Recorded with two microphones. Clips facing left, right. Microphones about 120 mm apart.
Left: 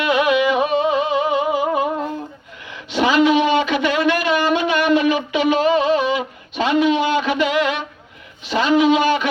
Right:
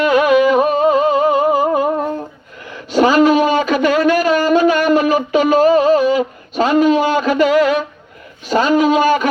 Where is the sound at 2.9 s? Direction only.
40° right (ahead or behind).